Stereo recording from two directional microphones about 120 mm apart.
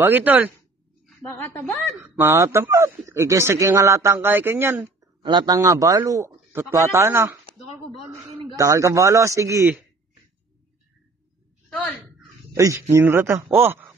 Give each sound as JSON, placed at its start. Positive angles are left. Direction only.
{"t": 0.0, "sound": "speech", "side_deg": -15}
{"t": 1.3, "sound": "a woman's voice", "side_deg": 25}
{"t": 2.0, "sound": "speech", "side_deg": -20}
{"t": 5.0, "sound": "a man's voice", "side_deg": -40}
{"t": 8.5, "sound": "speech", "side_deg": -25}
{"t": 12.5, "sound": "speech", "side_deg": -25}